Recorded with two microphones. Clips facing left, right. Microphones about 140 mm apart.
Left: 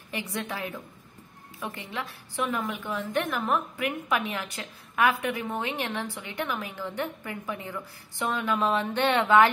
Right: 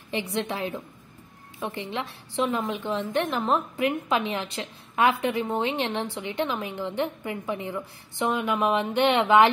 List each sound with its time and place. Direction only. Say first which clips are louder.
0.1 s a woman's voice: right 5 dB; 25° right (ahead or behind)